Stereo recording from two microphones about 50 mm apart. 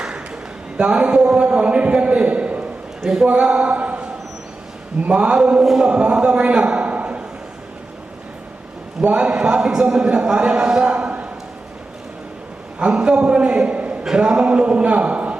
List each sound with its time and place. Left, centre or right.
0.8 s a man's voice: right
3.0 s speech: centre
3.2 s speech: right
5.0 s a man's voice: right
5.6 s a sound: centre
5.9 s a man's voice: right
9.0 s a man's voice: right
10.9 s a sound: right
12.8 s a man's voice: centre